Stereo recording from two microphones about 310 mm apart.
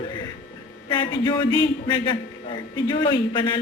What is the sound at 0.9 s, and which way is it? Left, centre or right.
A man's voice, centre.